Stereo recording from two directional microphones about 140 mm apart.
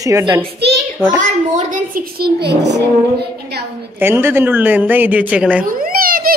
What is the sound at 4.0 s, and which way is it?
A woman's voice, 15° right (ahead or behind).